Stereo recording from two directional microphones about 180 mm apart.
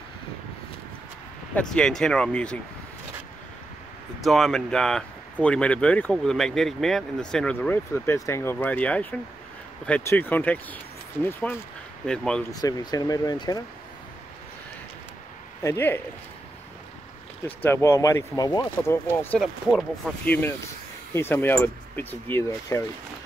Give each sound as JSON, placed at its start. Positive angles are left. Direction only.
{"t": 1.5, "sound": "speech", "side_deg": 5}
{"t": 4.2, "sound": "speech", "side_deg": 0}
{"t": 12.5, "sound": "speech", "side_deg": 20}
{"t": 15.6, "sound": "speech", "side_deg": 15}
{"t": 17.5, "sound": "speech", "side_deg": 10}